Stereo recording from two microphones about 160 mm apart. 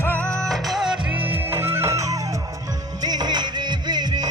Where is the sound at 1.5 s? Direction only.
15° right (ahead or behind).